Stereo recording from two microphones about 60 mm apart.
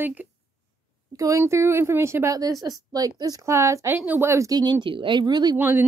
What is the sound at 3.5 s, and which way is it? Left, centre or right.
Speech, right.